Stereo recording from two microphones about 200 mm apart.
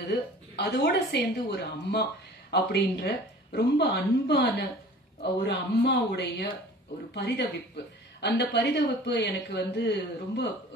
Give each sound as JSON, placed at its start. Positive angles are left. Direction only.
{"t": 0.1, "sound": "a woman's voice", "side_deg": 55}